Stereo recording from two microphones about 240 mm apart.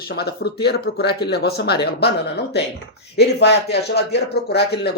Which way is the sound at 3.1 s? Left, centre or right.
Left.